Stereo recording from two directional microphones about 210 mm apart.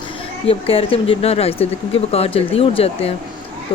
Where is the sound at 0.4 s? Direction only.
25° left (ahead or behind).